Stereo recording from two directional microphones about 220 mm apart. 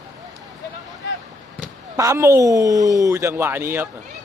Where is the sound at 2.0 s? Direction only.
15° right (ahead or behind).